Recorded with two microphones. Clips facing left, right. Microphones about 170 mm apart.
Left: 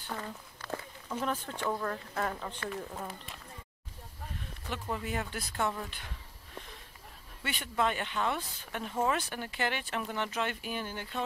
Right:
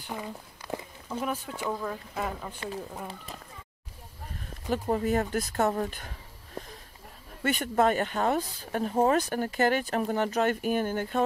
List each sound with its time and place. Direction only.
0.0 s speech: 10° right (ahead or behind)
4.6 s speech: 40° right (ahead or behind)